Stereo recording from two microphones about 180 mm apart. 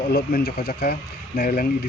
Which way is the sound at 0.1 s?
60° left (ahead or behind).